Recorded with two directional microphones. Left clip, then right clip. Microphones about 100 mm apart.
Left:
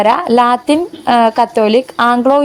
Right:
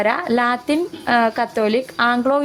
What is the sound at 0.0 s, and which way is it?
Speech, 40° left (ahead or behind).